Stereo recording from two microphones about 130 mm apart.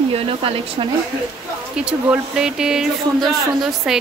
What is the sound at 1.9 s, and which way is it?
Speech, 10° right (ahead or behind).